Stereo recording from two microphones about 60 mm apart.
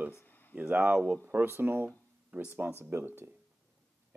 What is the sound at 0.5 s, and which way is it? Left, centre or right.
Speech, right.